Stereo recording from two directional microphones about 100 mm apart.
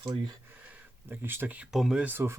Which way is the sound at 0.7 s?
20° right (ahead or behind).